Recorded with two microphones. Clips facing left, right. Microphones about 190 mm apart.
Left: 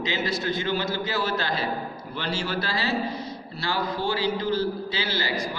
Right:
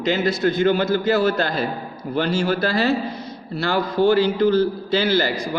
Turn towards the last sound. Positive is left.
turn(degrees=-50)  # may be behind; listen again after turning